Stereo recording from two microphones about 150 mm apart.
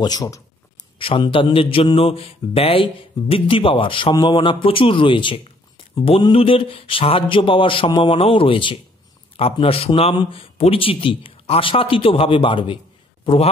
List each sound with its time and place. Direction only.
0.0 s a man's voice: 25° left (ahead or behind)